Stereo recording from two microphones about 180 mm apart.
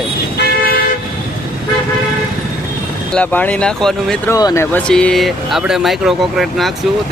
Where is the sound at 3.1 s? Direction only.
10° left (ahead or behind).